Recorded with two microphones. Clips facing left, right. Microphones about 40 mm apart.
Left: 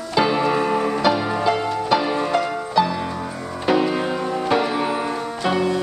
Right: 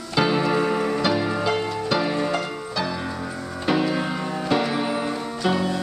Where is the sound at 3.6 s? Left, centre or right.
Centre.